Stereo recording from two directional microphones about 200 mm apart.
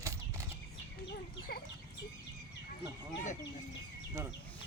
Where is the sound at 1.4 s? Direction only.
50° left (ahead or behind).